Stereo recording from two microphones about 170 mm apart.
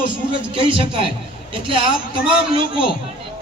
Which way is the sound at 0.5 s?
30° right (ahead or behind).